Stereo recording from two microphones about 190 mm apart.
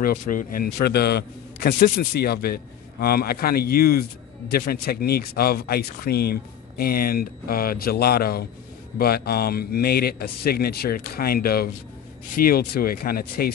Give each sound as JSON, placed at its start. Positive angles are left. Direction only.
{"t": 0.0, "sound": "a man's voice", "side_deg": 50}